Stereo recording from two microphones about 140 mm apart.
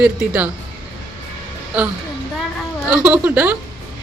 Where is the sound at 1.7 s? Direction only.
10° right (ahead or behind).